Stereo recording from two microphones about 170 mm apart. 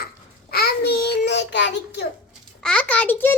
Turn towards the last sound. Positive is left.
turn(degrees=10)  # may be behind; listen again after turning